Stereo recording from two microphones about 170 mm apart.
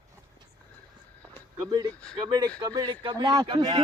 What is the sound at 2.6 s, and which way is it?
Speech, 20° right (ahead or behind).